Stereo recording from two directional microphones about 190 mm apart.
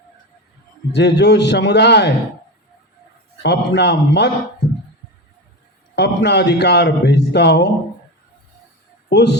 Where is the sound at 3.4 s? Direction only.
60° left (ahead or behind).